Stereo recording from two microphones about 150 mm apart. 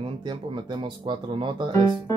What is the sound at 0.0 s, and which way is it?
Speech, 35° right (ahead or behind).